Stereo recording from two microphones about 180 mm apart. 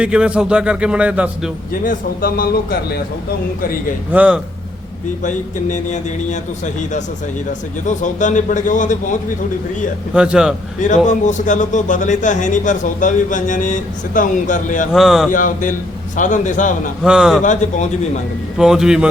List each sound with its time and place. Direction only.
0.0 s a man's voice: 5° right (ahead or behind)
1.8 s a man's voice: 50° left (ahead or behind)
4.1 s speech: 5° right (ahead or behind)
5.2 s a man's voice: 45° left (ahead or behind)
7.9 s a man's voice: 45° left (ahead or behind)
10.2 s a man's voice: 5° right (ahead or behind)
10.8 s a man's voice: 45° left (ahead or behind)
14.9 s a man's voice: centre (ahead or behind)
15.3 s a man's voice: 45° left (ahead or behind)
17.0 s a man's voice: centre (ahead or behind)
17.4 s a man's voice: 40° left (ahead or behind)
18.5 s a man's voice: 5° right (ahead or behind)